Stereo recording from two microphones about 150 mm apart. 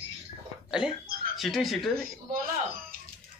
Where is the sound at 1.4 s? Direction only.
Centre (ahead or behind).